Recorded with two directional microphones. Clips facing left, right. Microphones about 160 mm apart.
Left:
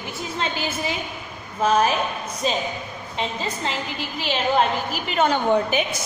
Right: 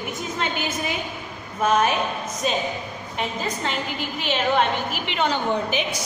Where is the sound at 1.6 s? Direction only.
30° left (ahead or behind).